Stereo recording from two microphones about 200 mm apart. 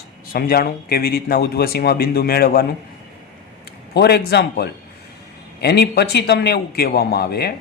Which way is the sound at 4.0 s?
55° left (ahead or behind).